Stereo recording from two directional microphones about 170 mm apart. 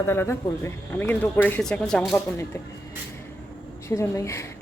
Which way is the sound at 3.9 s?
15° left (ahead or behind).